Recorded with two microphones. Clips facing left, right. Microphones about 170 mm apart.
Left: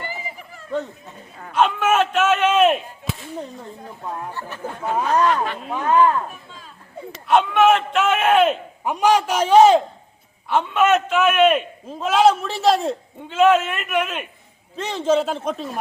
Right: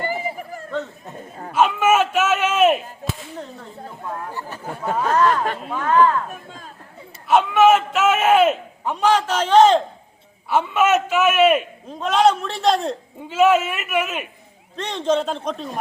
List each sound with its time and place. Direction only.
0.0 s a sound: 45° right (ahead or behind)
1.5 s whip: 5° right (ahead or behind)
4.4 s speech: 40° right (ahead or behind)
5.7 s a man's voice: 15° left (ahead or behind)
6.3 s speech: 50° right (ahead or behind)
7.3 s a man's voice: 5° right (ahead or behind)
8.8 s a man's voice: 10° left (ahead or behind)
10.5 s a man's voice: 5° right (ahead or behind)
14.8 s a man's voice: 5° left (ahead or behind)